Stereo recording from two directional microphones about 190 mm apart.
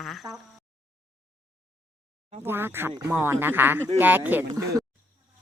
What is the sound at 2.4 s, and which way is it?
Speech, 10° right (ahead or behind).